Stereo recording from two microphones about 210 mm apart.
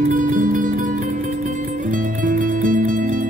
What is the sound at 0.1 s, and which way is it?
Music, 40° right (ahead or behind).